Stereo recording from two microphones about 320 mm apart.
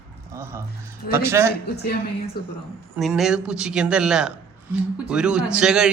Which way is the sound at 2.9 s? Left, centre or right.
Centre.